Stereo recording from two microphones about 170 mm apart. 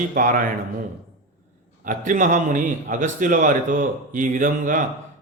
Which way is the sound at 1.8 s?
50° right (ahead or behind).